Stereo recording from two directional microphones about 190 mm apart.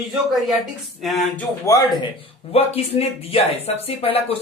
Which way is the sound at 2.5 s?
30° left (ahead or behind).